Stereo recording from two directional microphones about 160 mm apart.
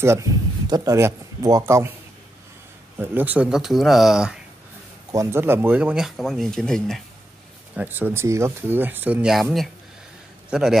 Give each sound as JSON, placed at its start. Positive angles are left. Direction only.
{"t": 0.0, "sound": "speech", "side_deg": -20}
{"t": 3.0, "sound": "speech", "side_deg": -10}
{"t": 5.1, "sound": "speech", "side_deg": -15}
{"t": 7.7, "sound": "a man's voice", "side_deg": -10}